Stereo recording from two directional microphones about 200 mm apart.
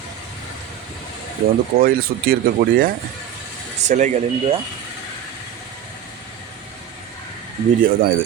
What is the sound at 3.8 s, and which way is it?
Speech, 35° right (ahead or behind).